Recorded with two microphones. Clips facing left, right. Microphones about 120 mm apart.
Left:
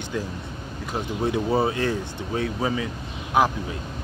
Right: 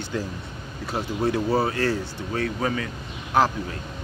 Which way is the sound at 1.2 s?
20° left (ahead or behind).